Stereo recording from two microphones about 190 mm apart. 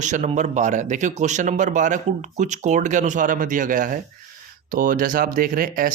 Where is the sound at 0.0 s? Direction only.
40° right (ahead or behind).